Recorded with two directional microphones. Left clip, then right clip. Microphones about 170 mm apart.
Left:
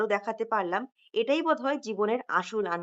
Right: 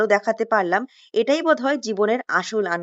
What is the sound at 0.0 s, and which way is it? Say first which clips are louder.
Speech: right 9 dB; 35° right (ahead or behind).